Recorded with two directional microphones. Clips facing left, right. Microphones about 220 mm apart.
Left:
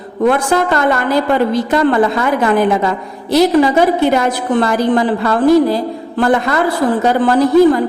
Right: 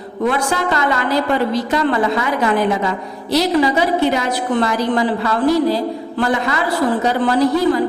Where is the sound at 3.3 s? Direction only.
50° left (ahead or behind).